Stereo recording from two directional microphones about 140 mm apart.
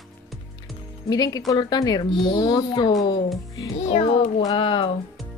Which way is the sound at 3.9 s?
45° left (ahead or behind).